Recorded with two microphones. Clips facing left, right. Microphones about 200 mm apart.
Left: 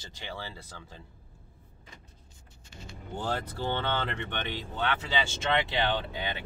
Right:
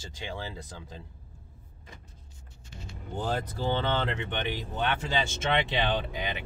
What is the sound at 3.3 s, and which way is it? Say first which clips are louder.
Speech: right 3 dB; 15° right (ahead or behind).